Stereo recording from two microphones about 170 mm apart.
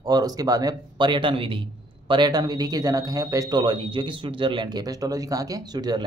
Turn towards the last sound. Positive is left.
turn(degrees=-25)  # may be behind; listen again after turning